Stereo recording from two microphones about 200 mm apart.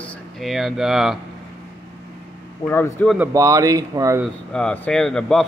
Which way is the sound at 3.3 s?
15° right (ahead or behind).